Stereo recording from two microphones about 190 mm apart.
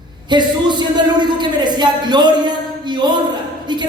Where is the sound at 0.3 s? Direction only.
25° right (ahead or behind).